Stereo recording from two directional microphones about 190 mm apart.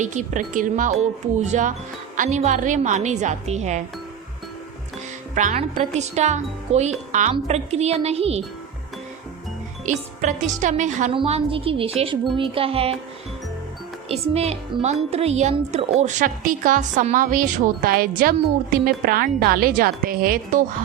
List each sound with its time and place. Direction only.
0.0 s speech: 40° right (ahead or behind)
5.3 s speech: 40° right (ahead or behind)
9.8 s speech: 40° right (ahead or behind)
11.1 s a woman's voice: 30° right (ahead or behind)
14.1 s a woman's voice: 35° right (ahead or behind)